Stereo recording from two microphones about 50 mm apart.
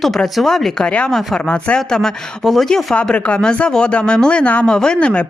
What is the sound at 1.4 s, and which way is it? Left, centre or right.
Speech, left.